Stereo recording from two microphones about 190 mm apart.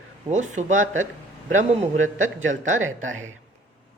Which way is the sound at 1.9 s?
90° right.